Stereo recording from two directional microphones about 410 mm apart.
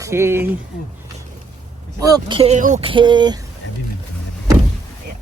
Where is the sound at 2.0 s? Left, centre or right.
Centre.